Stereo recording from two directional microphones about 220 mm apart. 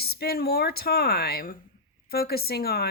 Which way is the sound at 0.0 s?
45° left (ahead or behind).